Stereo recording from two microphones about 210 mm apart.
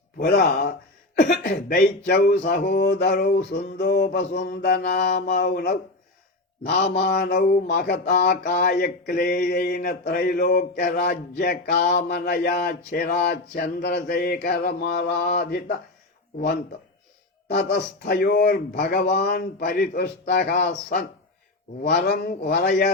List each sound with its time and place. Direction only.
0.2 s mantra: 45° left (ahead or behind)
17.5 s mantra: 55° left (ahead or behind)